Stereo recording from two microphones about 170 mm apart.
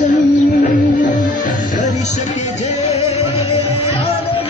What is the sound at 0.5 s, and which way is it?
Music, 50° left (ahead or behind).